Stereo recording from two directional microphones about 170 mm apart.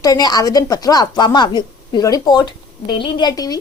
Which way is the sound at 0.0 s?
20° left (ahead or behind).